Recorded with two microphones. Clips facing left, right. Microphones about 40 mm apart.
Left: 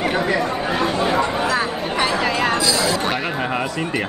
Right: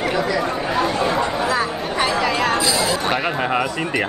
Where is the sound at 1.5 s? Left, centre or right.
Left.